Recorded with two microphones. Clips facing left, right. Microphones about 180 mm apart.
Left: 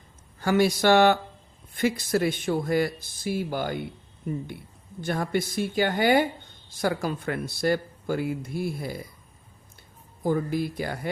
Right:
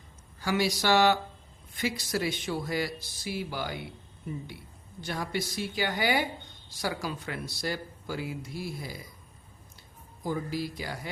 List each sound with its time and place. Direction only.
0.3 s speech: 55° left (ahead or behind)
10.2 s speech: 55° left (ahead or behind)